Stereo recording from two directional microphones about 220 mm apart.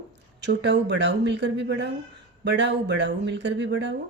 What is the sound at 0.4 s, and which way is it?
Speech, 50° right (ahead or behind).